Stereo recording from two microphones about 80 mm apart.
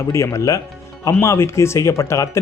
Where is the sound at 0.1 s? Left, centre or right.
Left.